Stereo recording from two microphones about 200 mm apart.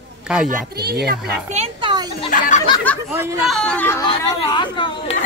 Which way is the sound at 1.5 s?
25° right (ahead or behind).